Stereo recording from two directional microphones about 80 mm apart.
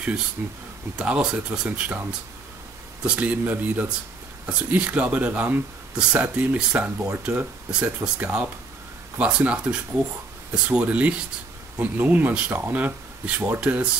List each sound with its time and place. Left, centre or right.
0.4 s a man's voice: right
0.9 s speech: centre
3.0 s a man's voice: centre